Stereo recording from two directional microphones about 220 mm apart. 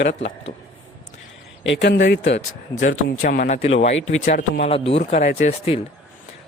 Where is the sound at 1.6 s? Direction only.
55° left (ahead or behind).